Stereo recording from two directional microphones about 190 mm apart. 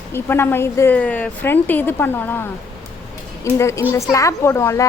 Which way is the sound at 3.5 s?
15° left (ahead or behind).